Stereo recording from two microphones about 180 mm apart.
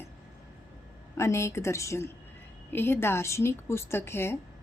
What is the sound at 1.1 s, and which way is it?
A woman's voice, 15° left (ahead or behind).